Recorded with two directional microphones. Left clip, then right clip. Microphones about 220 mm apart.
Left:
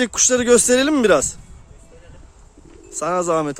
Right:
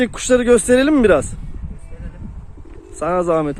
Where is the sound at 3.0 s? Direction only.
10° left (ahead or behind).